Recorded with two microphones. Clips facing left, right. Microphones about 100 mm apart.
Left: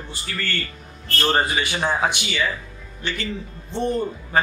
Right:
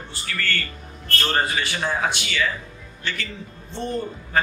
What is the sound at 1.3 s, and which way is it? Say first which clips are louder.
Speech: even; 20° left (ahead or behind).